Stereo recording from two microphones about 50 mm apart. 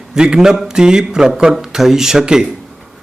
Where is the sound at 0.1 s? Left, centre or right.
Centre.